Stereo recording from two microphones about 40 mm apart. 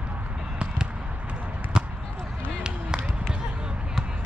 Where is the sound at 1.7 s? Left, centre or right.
Right.